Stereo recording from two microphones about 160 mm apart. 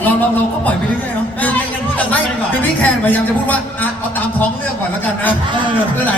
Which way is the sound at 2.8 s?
10° left (ahead or behind).